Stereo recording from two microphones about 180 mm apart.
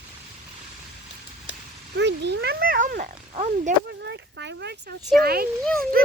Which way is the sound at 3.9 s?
70° right (ahead or behind).